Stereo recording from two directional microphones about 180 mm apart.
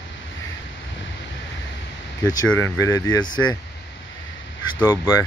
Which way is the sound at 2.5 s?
15° left (ahead or behind).